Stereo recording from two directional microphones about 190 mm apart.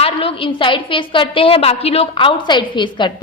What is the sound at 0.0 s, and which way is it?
A woman's voice, 30° left (ahead or behind).